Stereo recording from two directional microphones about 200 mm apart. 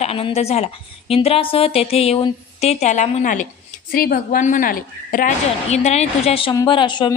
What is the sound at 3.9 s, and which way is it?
A woman's voice, 50° left (ahead or behind).